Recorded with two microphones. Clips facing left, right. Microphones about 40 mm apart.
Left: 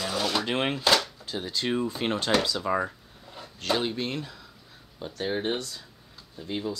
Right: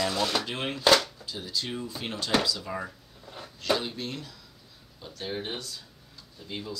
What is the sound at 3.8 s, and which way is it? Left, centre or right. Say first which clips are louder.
Speech: left 5 dB; left.